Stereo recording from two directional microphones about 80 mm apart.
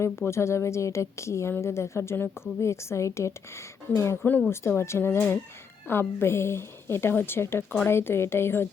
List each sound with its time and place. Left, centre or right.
0.0 s a woman's voice: left
4.3 s speech: left
4.8 s a woman's voice: left